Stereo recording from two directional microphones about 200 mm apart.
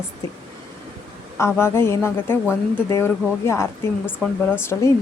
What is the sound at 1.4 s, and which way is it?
Speech, 10° left (ahead or behind).